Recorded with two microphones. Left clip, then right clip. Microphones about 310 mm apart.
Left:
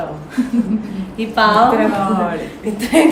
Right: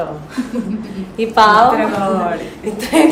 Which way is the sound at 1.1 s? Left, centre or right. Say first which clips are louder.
Right 4 dB; centre.